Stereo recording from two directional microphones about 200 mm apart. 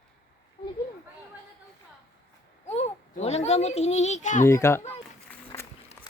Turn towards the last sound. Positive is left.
turn(degrees=10)  # may be behind; listen again after turning